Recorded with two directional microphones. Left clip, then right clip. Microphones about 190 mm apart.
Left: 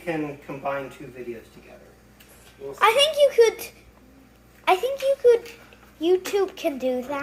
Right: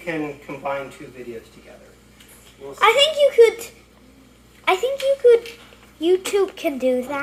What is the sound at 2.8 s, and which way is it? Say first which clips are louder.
A woman's voice: right 3 dB; 5° right (ahead or behind).